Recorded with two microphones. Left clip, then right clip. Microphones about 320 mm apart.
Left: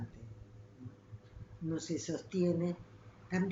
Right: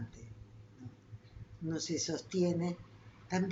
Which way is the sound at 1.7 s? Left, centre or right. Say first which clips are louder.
Right 2 dB; centre.